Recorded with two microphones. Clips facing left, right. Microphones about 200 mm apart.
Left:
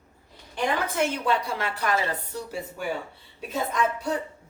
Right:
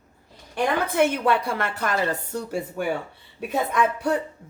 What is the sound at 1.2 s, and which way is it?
Speech, 60° right (ahead or behind).